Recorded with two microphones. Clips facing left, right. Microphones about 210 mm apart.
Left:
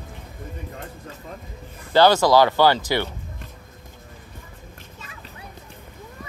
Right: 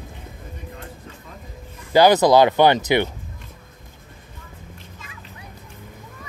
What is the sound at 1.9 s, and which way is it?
Speech, 15° right (ahead or behind).